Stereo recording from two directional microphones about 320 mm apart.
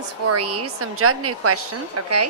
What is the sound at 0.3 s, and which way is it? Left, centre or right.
A woman's voice, right.